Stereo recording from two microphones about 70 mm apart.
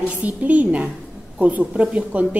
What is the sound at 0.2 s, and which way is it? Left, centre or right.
A woman's voice, right.